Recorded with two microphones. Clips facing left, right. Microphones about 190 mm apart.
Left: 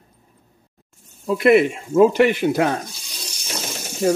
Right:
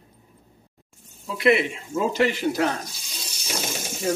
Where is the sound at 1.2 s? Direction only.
50° left (ahead or behind).